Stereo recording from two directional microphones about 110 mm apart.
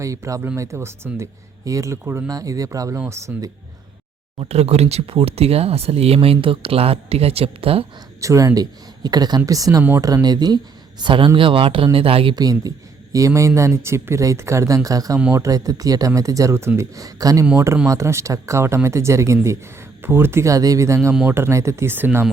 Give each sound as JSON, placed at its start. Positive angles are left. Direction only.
{"t": 0.0, "sound": "speech", "side_deg": -30}
{"t": 4.4, "sound": "speech", "side_deg": -70}
{"t": 8.2, "sound": "speech", "side_deg": -30}
{"t": 11.0, "sound": "speech", "side_deg": -50}
{"t": 12.4, "sound": "speech", "side_deg": -35}